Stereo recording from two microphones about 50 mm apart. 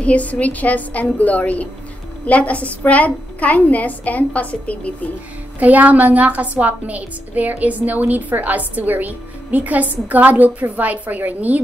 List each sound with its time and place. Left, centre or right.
0.0 s a woman's voice: left
5.6 s a woman's voice: right